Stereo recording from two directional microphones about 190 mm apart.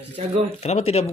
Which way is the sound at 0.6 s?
35° left (ahead or behind).